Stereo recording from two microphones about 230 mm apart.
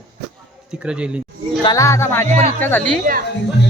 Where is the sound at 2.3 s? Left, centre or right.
Right.